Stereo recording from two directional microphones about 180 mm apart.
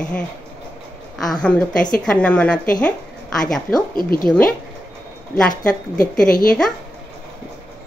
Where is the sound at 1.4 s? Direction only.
5° left (ahead or behind).